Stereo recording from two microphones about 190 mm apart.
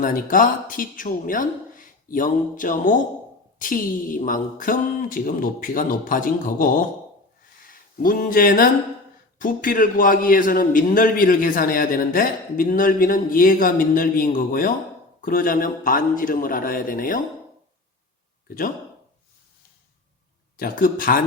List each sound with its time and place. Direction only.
0.0 s a man's voice: 45° left (ahead or behind)
18.4 s speech: 45° left (ahead or behind)
20.6 s a man's voice: 45° left (ahead or behind)